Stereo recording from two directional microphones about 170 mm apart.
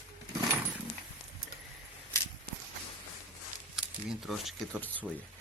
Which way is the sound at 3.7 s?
Centre (ahead or behind).